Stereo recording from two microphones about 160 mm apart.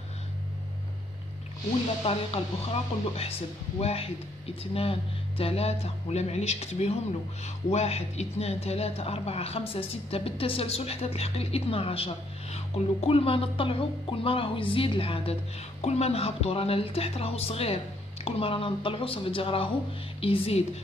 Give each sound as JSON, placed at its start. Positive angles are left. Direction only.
{"t": 2.0, "sound": "speech", "side_deg": 40}